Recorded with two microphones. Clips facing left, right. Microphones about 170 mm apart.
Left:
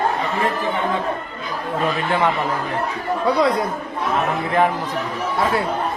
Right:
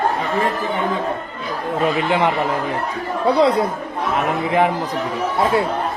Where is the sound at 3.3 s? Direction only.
30° right (ahead or behind).